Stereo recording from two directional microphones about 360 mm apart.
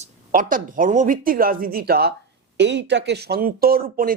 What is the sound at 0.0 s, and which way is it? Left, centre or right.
Speech, right.